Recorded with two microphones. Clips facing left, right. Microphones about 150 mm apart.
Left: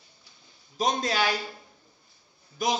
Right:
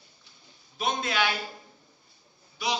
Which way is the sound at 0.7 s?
40° left (ahead or behind).